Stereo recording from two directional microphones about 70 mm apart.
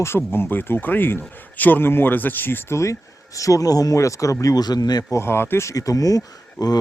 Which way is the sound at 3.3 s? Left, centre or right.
Left.